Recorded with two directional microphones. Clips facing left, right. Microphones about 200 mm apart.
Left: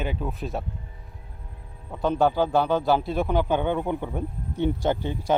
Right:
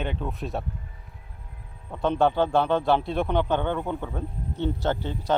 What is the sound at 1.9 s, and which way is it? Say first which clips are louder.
A man's voice: even; 5° left (ahead or behind).